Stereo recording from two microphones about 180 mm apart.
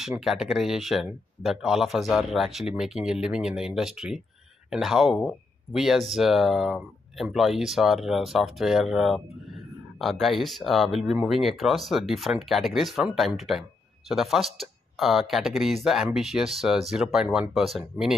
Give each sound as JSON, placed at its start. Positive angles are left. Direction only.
{"t": 0.1, "sound": "speech", "side_deg": 0}